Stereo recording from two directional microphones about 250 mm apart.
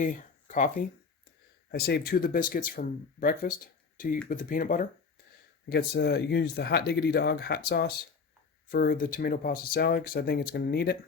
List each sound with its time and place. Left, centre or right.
0.0 s speech: left